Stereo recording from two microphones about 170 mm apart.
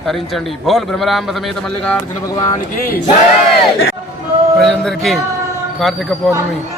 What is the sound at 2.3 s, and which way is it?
Speech, 20° left (ahead or behind).